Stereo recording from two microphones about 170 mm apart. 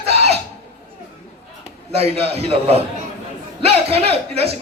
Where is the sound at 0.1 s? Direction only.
40° right (ahead or behind).